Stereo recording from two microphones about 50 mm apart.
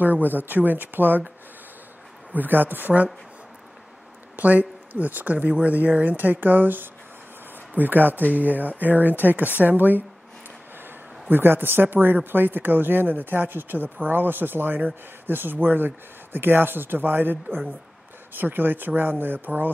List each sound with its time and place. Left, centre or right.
0.0 s speech: right
2.3 s speech: right
4.4 s speech: right